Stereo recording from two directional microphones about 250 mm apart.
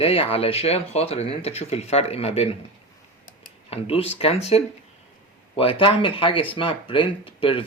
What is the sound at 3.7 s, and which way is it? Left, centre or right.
Speech, left.